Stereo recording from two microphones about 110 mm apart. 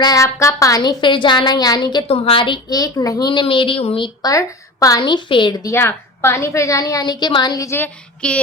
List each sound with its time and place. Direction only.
0.0 s a woman's voice: 30° left (ahead or behind)
0.8 s a woman's voice: 45° left (ahead or behind)
2.0 s a woman's voice: 60° left (ahead or behind); by 3.4 s 40° left (ahead or behind)
3.4 s a woman's voice: 50° left (ahead or behind)
4.2 s a woman's voice: 30° left (ahead or behind)
5.0 s a woman's voice: 45° left (ahead or behind)
5.6 s a woman's voice: 20° left (ahead or behind); by 7.7 s 40° left (ahead or behind)
8.2 s child singing: 10° left (ahead or behind)